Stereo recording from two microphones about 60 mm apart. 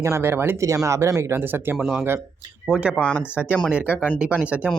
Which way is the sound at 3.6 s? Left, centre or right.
Centre.